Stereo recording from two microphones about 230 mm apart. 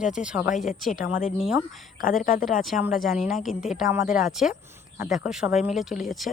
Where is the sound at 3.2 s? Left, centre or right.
Centre.